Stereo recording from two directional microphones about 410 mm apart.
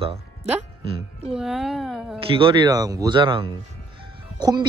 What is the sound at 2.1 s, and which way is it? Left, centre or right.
Speech, centre.